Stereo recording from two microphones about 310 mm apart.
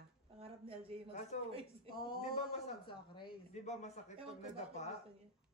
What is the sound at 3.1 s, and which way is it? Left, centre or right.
A man's voice, left.